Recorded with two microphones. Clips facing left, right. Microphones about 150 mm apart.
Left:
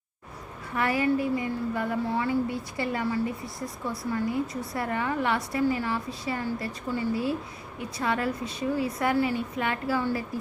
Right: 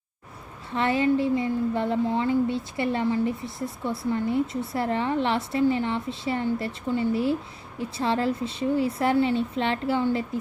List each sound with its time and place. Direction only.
0.7 s a woman's voice: 25° right (ahead or behind)